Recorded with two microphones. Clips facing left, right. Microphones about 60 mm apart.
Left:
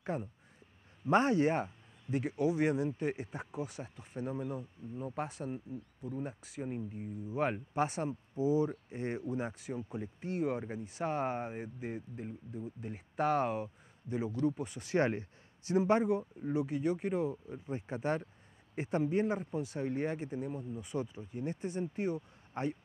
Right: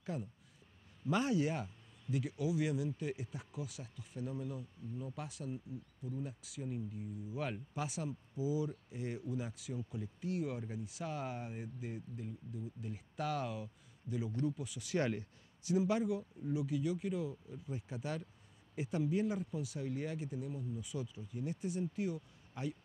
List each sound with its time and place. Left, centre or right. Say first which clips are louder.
0.0 s speech: left 5 dB; left